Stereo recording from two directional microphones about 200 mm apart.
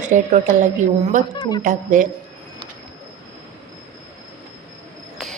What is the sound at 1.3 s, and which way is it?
Speech, 20° left (ahead or behind).